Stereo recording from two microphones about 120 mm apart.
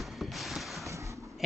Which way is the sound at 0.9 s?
25° right (ahead or behind).